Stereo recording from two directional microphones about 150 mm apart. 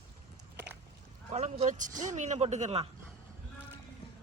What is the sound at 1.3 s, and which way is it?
Speech, 45° right (ahead or behind).